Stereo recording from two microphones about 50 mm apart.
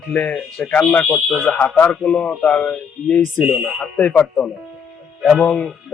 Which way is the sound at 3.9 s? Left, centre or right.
Left.